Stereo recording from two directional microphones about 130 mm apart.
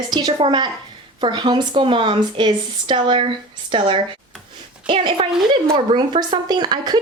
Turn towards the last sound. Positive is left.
turn(degrees=-35)  # may be behind; listen again after turning